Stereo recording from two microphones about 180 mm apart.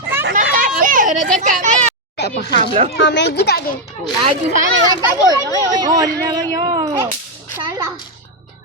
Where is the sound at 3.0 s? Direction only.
75° left (ahead or behind).